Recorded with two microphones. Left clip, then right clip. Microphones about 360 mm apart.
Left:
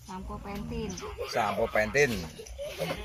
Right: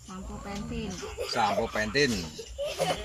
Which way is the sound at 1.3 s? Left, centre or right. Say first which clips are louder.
Even; centre.